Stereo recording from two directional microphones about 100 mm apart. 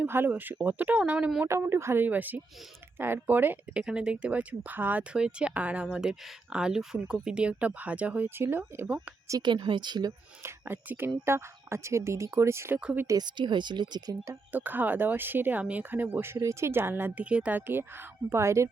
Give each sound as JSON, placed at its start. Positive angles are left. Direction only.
{"t": 0.0, "sound": "speech", "side_deg": -20}
{"t": 1.5, "sound": "speech", "side_deg": -25}
{"t": 9.4, "sound": "speech", "side_deg": -50}
{"t": 10.4, "sound": "speech", "side_deg": -20}
{"t": 12.8, "sound": "speech", "side_deg": -15}
{"t": 13.1, "sound": "speech", "side_deg": -45}
{"t": 14.5, "sound": "speech", "side_deg": -20}